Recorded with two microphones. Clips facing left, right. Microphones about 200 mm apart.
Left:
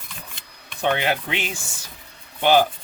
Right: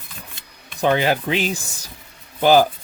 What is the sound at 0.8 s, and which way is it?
Speech, 35° right (ahead or behind).